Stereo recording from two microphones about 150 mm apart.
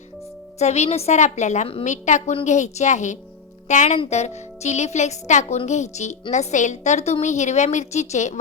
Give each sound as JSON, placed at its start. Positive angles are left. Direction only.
{"t": 0.6, "sound": "speech", "side_deg": 50}